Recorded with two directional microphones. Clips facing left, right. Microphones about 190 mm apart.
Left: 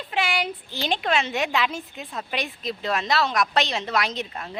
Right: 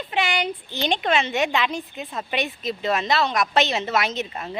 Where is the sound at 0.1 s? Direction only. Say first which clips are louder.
Right 1 dB; centre (ahead or behind).